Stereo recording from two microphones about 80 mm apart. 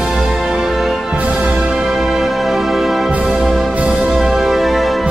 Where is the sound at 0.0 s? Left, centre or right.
Centre.